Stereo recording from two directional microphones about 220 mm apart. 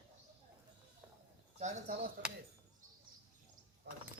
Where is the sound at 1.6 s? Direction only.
30° right (ahead or behind).